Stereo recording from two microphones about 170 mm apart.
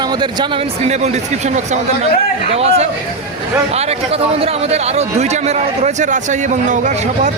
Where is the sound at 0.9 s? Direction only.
40° right (ahead or behind).